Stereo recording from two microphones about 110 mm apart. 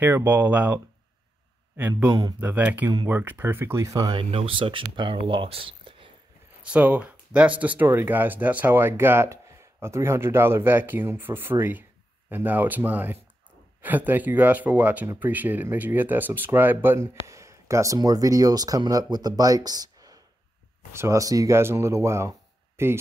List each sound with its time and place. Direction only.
0.0 s speech: 15° right (ahead or behind)
1.8 s speech: 15° right (ahead or behind); by 4.2 s 35° right (ahead or behind)
4.2 s speech: 55° right (ahead or behind)
6.6 s speech: 10° right (ahead or behind); by 20.2 s 35° right (ahead or behind)
20.9 s speech: 25° right (ahead or behind)